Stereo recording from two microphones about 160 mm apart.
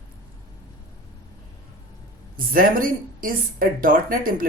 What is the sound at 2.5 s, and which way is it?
Speech, 60° right (ahead or behind).